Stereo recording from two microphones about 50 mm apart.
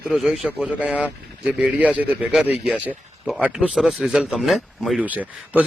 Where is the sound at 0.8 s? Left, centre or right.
Right.